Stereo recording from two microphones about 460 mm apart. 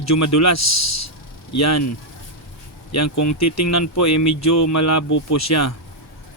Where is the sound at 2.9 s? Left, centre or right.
Left.